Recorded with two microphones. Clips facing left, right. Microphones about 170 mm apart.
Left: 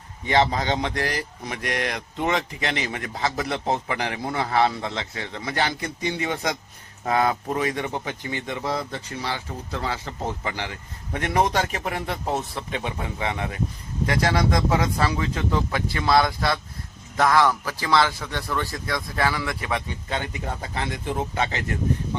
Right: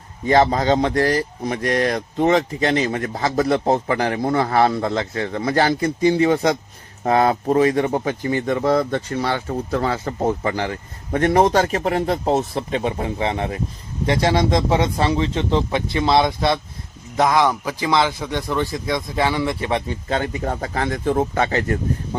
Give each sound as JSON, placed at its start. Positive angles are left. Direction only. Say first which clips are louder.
{"t": 0.3, "sound": "speech", "louder": "right 6 dB", "side_deg": -45}
{"t": 3.2, "sound": "speech", "louder": "right 7 dB", "side_deg": -45}
{"t": 11.8, "sound": "a man's voice", "louder": "right 9 dB", "side_deg": -35}